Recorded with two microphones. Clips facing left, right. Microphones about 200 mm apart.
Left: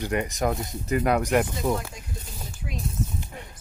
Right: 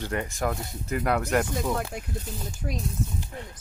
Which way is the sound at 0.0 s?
15° left (ahead or behind).